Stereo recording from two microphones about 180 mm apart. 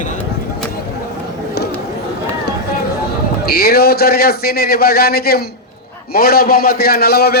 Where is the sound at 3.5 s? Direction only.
60° left (ahead or behind).